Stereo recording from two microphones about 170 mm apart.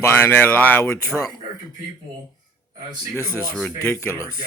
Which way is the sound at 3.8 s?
15° left (ahead or behind).